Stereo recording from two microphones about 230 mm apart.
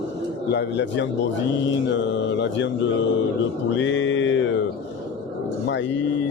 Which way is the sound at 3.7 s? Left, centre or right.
Left.